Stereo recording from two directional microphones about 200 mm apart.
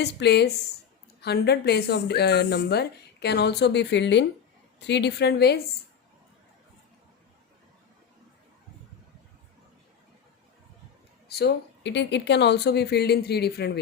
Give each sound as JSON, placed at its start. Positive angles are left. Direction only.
{"t": 0.0, "sound": "a woman's voice", "side_deg": 55}
{"t": 11.3, "sound": "a woman's voice", "side_deg": 50}